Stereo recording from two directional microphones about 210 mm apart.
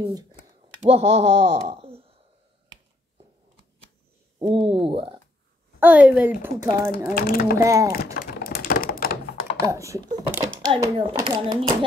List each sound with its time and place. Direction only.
0.0 s speech: 20° right (ahead or behind)
0.8 s speech: 60° right (ahead or behind)
1.7 s a sound: 25° right (ahead or behind)
4.4 s speech: 25° right (ahead or behind)
5.8 s a woman's voice: 10° right (ahead or behind)
6.6 s speech: 20° right (ahead or behind)
7.2 s speech: 45° left (ahead or behind)
7.5 s a woman's voice: 15° right (ahead or behind)
7.9 s thunk: 45° left (ahead or behind)
9.7 s a woman's voice: 15° right (ahead or behind)